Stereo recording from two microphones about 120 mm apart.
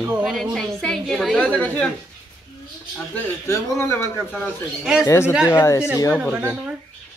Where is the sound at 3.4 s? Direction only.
25° left (ahead or behind).